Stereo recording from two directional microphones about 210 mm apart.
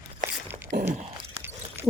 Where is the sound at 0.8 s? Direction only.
30° right (ahead or behind).